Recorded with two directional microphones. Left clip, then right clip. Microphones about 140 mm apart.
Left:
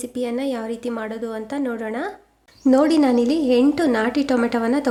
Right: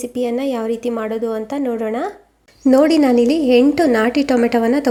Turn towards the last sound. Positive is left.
turn(degrees=-15)  # may be behind; listen again after turning